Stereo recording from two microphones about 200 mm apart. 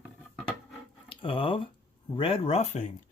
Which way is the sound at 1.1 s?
25° left (ahead or behind).